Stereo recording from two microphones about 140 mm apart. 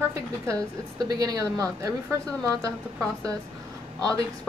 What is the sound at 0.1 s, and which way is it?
A woman's voice, 25° right (ahead or behind).